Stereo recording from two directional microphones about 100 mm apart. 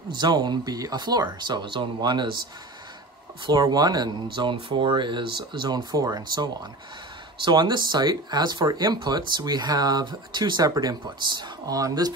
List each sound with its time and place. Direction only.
0.1 s speech: 45° right (ahead or behind)
3.4 s speech: 40° right (ahead or behind)